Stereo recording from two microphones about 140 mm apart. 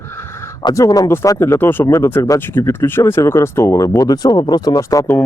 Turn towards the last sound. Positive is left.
turn(degrees=25)  # may be behind; listen again after turning